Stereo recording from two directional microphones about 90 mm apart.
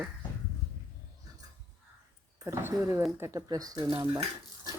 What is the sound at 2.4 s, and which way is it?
Speech, 25° right (ahead or behind).